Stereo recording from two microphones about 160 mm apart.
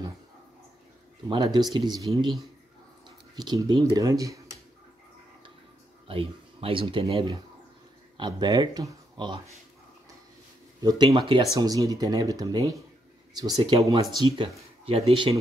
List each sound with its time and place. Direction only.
1.3 s speech: 25° right (ahead or behind)
3.3 s speech: 25° right (ahead or behind)
6.0 s speech: 35° right (ahead or behind)
10.8 s speech: 25° right (ahead or behind)